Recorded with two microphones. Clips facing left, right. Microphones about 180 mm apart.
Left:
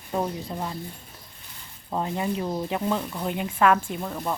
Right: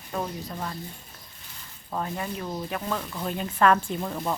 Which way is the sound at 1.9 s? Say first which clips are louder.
Left 4 dB; 20° left (ahead or behind).